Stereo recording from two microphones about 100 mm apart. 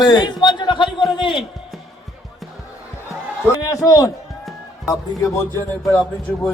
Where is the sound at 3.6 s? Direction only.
35° left (ahead or behind).